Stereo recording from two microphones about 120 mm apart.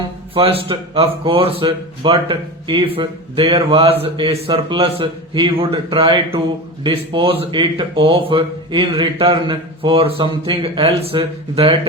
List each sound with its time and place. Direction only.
0.3 s a man's voice: 50° right (ahead or behind)